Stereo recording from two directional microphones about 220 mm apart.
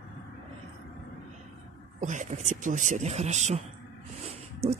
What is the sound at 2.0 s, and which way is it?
Speech, 35° right (ahead or behind).